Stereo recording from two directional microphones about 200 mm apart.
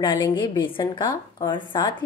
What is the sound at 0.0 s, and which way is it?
Speech, 20° left (ahead or behind).